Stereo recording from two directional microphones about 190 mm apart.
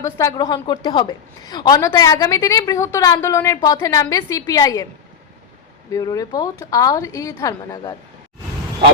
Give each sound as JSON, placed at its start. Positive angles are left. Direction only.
{"t": 0.0, "sound": "a woman's voice", "side_deg": 15}
{"t": 5.9, "sound": "a woman's voice", "side_deg": 20}